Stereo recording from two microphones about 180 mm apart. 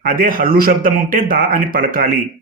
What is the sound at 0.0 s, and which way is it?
Speech, 50° right (ahead or behind).